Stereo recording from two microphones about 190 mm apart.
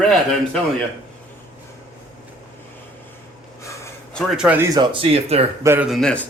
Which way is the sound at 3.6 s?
15° left (ahead or behind).